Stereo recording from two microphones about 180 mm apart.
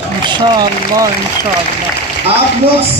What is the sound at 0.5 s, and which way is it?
Speech, 20° right (ahead or behind).